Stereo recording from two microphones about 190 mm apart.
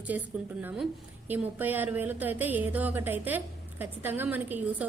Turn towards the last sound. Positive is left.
turn(degrees=-10)  # may be behind; listen again after turning